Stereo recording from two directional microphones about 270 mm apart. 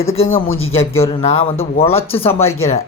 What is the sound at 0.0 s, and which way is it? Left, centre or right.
Speech, left.